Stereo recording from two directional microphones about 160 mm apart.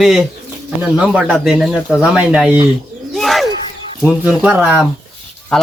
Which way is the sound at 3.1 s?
Centre (ahead or behind).